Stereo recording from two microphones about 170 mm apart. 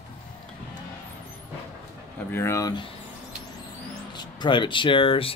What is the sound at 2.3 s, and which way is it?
Speech, 15° left (ahead or behind).